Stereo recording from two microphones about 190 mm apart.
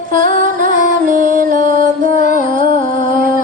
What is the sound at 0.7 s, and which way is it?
Music, 40° left (ahead or behind).